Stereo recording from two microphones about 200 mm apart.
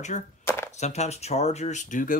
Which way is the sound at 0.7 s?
35° left (ahead or behind).